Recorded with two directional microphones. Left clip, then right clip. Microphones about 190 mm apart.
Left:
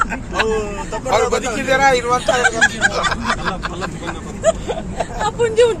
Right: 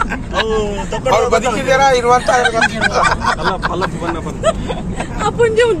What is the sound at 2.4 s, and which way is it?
Speech, 30° right (ahead or behind).